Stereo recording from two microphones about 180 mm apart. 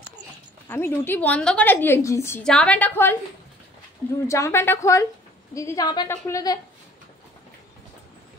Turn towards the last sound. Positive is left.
turn(degrees=20)  # may be behind; listen again after turning